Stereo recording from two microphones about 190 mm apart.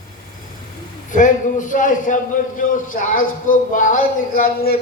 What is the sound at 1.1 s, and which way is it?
A man's voice, 45° left (ahead or behind).